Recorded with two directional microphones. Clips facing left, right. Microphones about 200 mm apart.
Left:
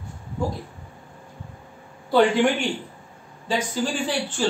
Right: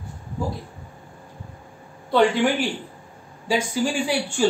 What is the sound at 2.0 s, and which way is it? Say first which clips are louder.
Speech: left 1 dB; centre (ahead or behind).